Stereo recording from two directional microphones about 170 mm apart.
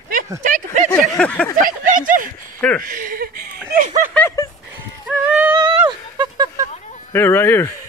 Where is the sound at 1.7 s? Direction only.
55° right (ahead or behind).